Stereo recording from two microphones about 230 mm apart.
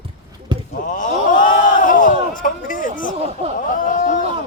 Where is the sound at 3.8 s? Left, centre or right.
Left.